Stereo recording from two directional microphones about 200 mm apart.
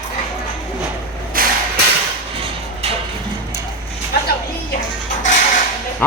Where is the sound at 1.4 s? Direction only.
45° right (ahead or behind).